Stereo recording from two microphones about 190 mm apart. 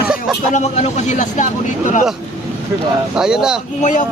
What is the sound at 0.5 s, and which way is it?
Speech, 35° left (ahead or behind).